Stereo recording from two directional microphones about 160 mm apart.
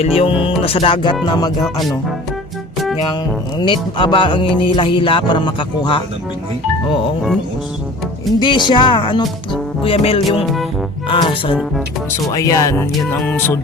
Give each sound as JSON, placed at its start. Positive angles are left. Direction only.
{"t": 0.0, "sound": "speech", "side_deg": 35}
{"t": 1.6, "sound": "speech", "side_deg": 0}
{"t": 3.6, "sound": "speech", "side_deg": 30}
{"t": 8.4, "sound": "speech", "side_deg": 30}
{"t": 12.3, "sound": "speech", "side_deg": 20}
{"t": 13.1, "sound": "music", "side_deg": 10}